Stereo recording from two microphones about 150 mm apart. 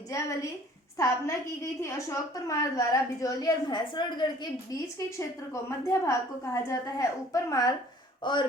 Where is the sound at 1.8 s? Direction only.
20° left (ahead or behind).